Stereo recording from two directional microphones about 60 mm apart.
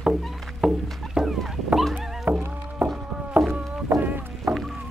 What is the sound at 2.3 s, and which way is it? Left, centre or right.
Music, right.